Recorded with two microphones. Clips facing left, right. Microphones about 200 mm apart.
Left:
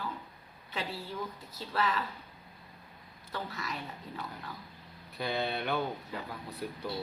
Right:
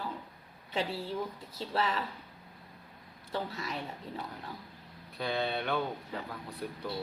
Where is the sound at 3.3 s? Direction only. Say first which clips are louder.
Right 3 dB; 30° right (ahead or behind).